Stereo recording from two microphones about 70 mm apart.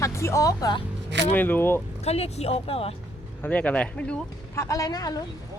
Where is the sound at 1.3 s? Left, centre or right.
Left.